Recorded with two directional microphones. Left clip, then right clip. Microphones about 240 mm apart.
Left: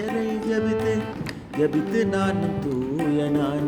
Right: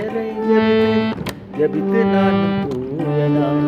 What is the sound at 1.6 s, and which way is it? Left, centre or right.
Music, left.